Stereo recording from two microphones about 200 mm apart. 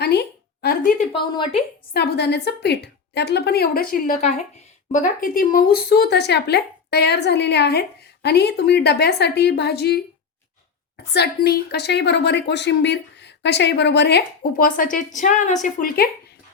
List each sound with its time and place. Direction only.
0.0 s a sound: 55° left (ahead or behind)
1.1 s a woman's voice: 25° left (ahead or behind)
1.9 s a woman's voice: 55° left (ahead or behind)
11.1 s a woman's voice: 55° left (ahead or behind)